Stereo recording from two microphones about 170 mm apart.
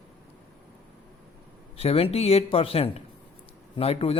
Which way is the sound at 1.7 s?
35° left (ahead or behind).